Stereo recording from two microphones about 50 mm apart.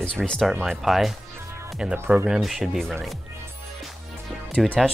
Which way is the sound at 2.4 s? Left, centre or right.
Centre.